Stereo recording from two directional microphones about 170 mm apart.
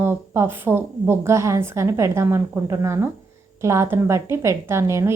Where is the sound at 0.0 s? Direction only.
15° right (ahead or behind).